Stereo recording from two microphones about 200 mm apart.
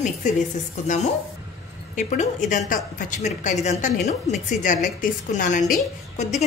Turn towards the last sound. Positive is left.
turn(degrees=35)  # may be behind; listen again after turning